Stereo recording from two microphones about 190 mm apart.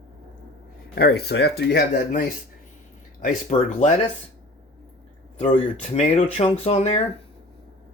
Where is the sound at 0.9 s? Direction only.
55° left (ahead or behind); by 3.9 s 40° left (ahead or behind).